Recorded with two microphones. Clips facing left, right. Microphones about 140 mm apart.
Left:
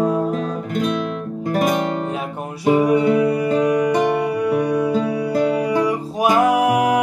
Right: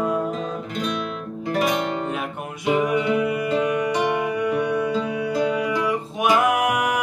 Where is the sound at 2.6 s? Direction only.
35° left (ahead or behind).